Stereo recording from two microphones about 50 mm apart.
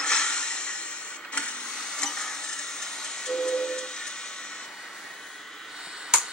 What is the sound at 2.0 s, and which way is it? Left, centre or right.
Steam whistle, centre.